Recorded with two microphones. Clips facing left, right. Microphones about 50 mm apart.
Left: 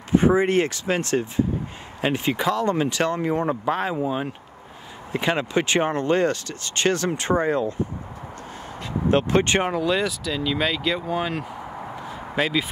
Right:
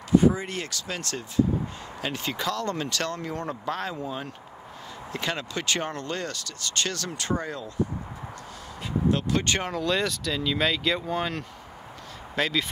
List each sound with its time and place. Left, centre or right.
0.1 s speech: left
2.2 s speech: centre
9.1 s speech: left
9.8 s speech: centre